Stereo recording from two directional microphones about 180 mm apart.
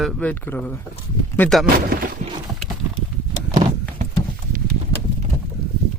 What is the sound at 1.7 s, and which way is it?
Speech, 55° right (ahead or behind).